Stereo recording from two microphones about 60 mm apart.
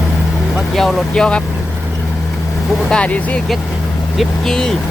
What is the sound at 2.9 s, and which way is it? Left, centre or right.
Speech, centre.